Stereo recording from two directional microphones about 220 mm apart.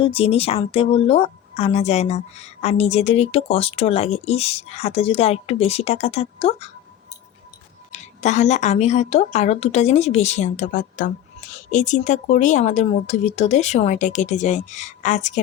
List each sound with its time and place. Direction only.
0.0 s a woman's voice: 25° left (ahead or behind)
7.9 s a woman's voice: 30° left (ahead or behind)